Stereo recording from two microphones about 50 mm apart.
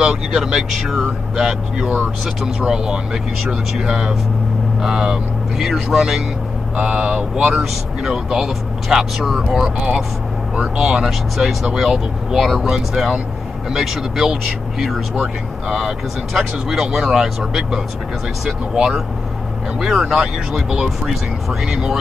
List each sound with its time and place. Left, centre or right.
0.0 s speech: centre
5.6 s speech: centre
6.8 s speech: centre
8.0 s speech: centre
16.3 s speech: centre